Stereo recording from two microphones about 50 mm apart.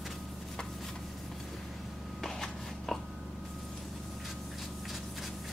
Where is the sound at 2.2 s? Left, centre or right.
Centre.